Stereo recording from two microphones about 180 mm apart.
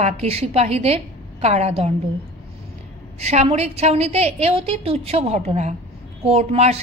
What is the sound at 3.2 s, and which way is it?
A woman's voice, 35° right (ahead or behind).